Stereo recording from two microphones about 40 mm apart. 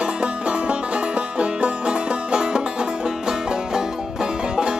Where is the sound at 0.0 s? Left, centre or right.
Right.